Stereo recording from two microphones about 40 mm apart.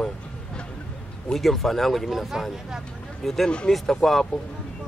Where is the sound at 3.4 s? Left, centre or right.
Left.